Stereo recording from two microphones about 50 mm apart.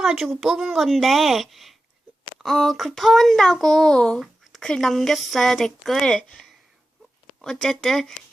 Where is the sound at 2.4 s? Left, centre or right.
Centre.